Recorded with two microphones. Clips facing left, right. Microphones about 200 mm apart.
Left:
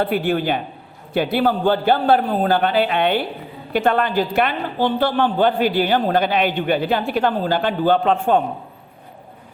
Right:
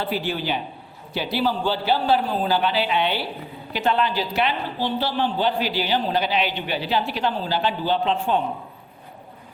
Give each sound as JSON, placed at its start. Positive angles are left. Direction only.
{"t": 0.0, "sound": "a man's voice", "side_deg": 55}